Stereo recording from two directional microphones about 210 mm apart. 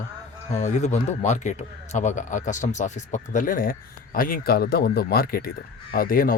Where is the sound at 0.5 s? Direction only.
35° left (ahead or behind).